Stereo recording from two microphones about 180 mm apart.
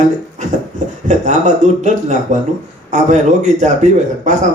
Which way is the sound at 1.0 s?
40° right (ahead or behind).